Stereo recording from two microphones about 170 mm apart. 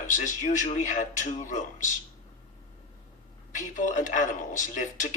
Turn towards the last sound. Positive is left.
turn(degrees=45)  # may be behind; listen again after turning